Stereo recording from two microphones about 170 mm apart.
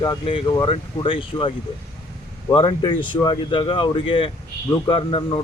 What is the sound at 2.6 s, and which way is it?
Speech, 30° left (ahead or behind).